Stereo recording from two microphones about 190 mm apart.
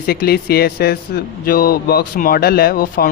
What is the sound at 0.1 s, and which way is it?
Speech, 55° left (ahead or behind).